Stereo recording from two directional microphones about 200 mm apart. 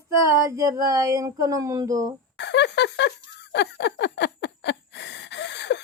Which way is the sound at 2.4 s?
60° left (ahead or behind).